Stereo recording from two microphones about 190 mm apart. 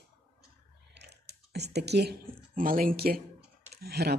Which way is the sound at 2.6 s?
50° right (ahead or behind).